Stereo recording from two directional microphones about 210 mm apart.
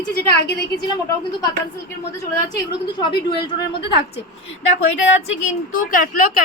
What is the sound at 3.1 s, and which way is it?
Speech, 25° left (ahead or behind).